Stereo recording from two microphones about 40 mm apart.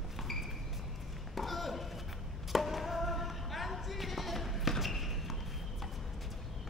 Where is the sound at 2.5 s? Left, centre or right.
Centre.